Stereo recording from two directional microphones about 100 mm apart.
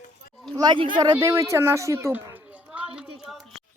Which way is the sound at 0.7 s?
50° right (ahead or behind).